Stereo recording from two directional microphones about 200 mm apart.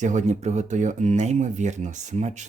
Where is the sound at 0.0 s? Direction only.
35° right (ahead or behind).